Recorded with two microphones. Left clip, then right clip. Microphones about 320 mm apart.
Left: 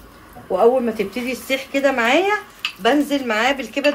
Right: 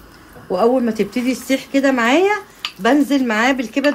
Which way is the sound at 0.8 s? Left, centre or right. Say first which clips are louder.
Right 3 dB; right.